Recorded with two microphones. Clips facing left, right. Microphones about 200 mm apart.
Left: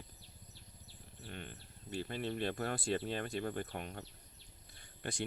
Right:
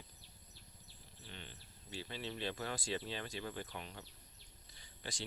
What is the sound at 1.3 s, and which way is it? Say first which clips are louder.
Speech: left 6 dB; 55° left (ahead or behind).